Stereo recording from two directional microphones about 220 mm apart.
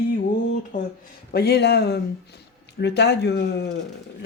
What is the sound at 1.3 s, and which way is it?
Speech, 45° left (ahead or behind).